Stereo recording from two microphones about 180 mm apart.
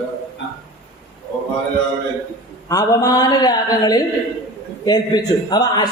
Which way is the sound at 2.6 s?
20° left (ahead or behind).